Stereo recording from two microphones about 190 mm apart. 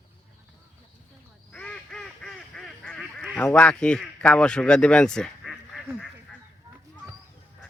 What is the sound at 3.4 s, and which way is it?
Speech, 5° left (ahead or behind).